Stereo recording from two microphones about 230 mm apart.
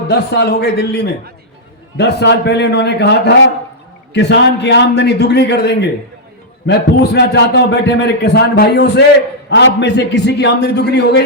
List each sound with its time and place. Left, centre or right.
0.1 s a man's voice: left